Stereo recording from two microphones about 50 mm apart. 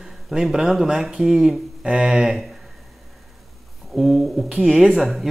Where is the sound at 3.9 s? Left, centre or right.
Centre.